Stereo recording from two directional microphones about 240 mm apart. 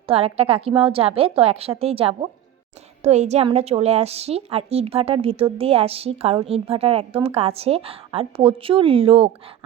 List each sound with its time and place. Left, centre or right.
0.1 s a woman's voice: right